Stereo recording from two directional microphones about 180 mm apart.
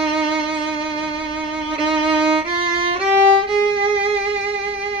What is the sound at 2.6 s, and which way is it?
Violin, 30° right (ahead or behind).